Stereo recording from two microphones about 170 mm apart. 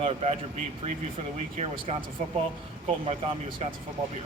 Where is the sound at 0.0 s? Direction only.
35° right (ahead or behind).